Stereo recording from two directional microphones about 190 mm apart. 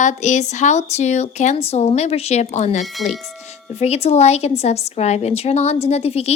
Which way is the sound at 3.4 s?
35° left (ahead or behind).